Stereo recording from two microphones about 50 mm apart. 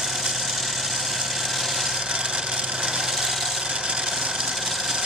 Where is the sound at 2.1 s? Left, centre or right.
Centre.